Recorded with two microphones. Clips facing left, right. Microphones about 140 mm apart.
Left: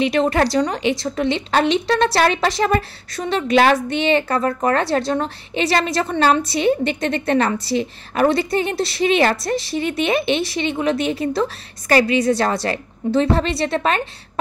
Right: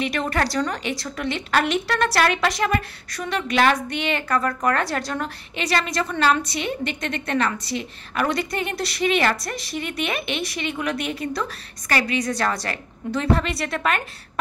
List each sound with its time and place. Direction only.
0.0 s a woman's voice: 30° left (ahead or behind)